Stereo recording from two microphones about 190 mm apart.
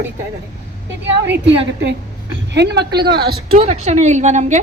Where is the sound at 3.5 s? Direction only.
35° right (ahead or behind).